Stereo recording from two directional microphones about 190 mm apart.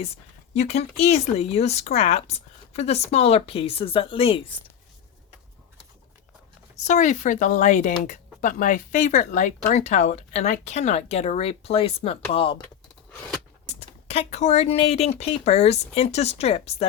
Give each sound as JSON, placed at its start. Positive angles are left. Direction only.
{"t": 0.5, "sound": "speech", "side_deg": 35}
{"t": 6.8, "sound": "speech", "side_deg": 40}
{"t": 13.7, "sound": "speech", "side_deg": 35}